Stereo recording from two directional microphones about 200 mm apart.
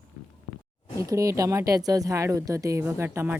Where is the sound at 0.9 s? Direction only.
15° right (ahead or behind).